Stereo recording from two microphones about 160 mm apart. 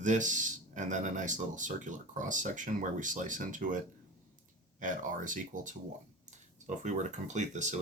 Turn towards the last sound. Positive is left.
turn(degrees=-50)  # may be behind; listen again after turning